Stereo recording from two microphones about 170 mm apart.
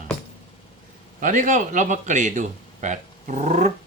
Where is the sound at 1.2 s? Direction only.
50° right (ahead or behind).